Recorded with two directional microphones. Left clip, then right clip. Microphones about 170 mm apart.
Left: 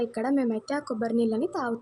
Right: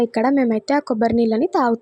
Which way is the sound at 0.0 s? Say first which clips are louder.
Right 9 dB; 40° right (ahead or behind).